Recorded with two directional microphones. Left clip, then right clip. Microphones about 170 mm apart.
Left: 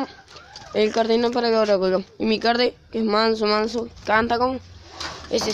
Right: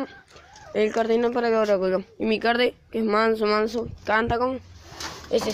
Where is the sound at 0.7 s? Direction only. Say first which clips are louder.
Left 2 dB; 10° left (ahead or behind).